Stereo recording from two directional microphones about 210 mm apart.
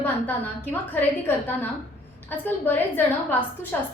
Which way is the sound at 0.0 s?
10° left (ahead or behind).